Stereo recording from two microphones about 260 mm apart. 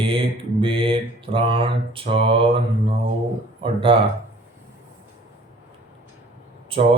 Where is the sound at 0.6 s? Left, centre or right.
Centre.